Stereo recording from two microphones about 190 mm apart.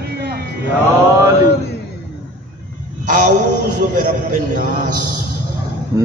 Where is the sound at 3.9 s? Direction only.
45° right (ahead or behind).